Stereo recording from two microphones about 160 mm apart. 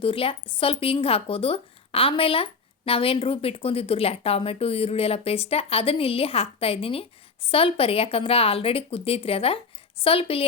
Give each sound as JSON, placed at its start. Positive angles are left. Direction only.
{"t": 0.0, "sound": "a woman's voice", "side_deg": 35}